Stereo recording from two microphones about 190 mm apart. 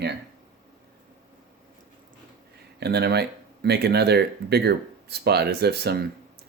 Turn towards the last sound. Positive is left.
turn(degrees=-60)  # may be behind; listen again after turning